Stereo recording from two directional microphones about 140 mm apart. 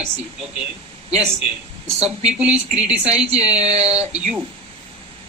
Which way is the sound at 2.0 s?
50° right (ahead or behind).